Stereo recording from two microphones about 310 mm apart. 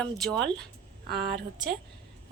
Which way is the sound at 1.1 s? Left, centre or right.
Right.